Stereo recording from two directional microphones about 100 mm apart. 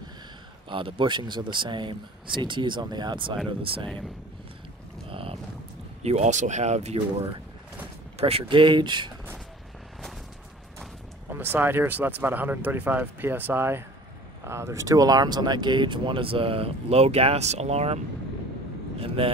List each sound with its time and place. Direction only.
0.7 s speech: 55° right (ahead or behind)
3.6 s speech: 65° right (ahead or behind)
5.1 s boat: 65° right (ahead or behind)
6.0 s speech: 90° right
8.2 s speech: 75° right (ahead or behind); by 9.1 s 50° right (ahead or behind)
11.2 s speech: 20° right (ahead or behind); by 18.0 s 90° right
18.9 s speech: 70° right (ahead or behind)